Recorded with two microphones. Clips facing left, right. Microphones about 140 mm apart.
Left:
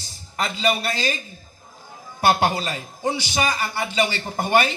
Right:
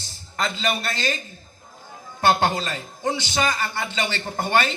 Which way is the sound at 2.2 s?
10° left (ahead or behind).